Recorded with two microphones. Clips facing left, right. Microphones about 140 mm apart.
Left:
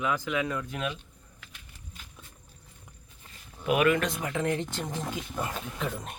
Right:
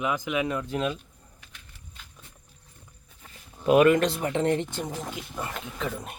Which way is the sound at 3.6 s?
35° right (ahead or behind).